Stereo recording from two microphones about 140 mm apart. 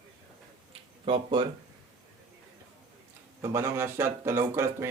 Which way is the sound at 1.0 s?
35° right (ahead or behind).